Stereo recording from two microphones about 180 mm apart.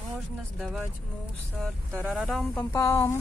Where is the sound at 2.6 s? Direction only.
15° left (ahead or behind).